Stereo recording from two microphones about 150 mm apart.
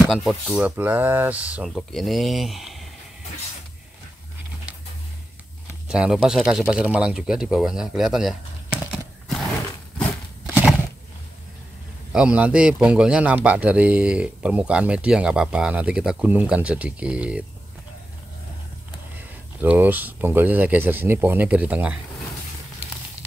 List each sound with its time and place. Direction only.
0.1 s speech: centre (ahead or behind)
5.9 s speech: 5° right (ahead or behind)
10.5 s a sound: 5° right (ahead or behind)
12.1 s a man's voice: 5° right (ahead or behind)
19.1 s a man's voice: 10° right (ahead or behind)